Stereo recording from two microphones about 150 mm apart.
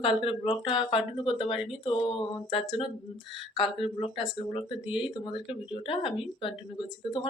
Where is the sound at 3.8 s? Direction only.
35° left (ahead or behind).